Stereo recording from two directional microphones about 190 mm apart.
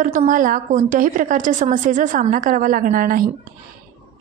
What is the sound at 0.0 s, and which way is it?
A woman's voice, 45° right (ahead or behind).